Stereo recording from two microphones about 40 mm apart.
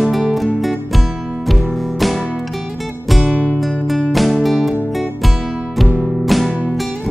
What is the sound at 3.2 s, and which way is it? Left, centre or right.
Music, right.